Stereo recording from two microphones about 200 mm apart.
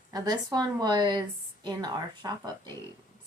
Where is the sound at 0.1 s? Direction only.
20° right (ahead or behind).